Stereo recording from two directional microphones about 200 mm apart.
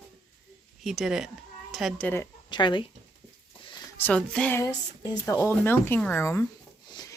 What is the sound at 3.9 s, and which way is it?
Speech, 5° left (ahead or behind).